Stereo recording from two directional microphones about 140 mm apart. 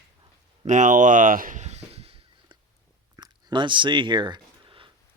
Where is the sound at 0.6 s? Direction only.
65° right (ahead or behind).